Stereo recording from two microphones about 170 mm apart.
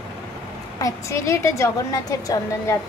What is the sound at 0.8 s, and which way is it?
A woman's voice, 20° left (ahead or behind).